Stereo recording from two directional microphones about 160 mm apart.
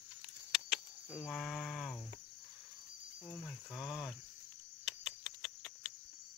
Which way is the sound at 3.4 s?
Centre (ahead or behind).